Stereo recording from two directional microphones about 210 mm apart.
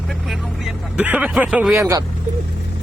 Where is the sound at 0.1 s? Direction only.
Centre (ahead or behind).